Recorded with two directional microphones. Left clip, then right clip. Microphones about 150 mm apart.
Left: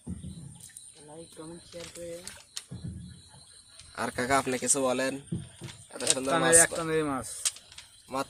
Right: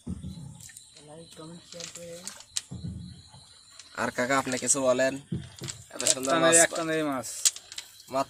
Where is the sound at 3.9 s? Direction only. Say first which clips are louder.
Right 3 dB; 15° right (ahead or behind).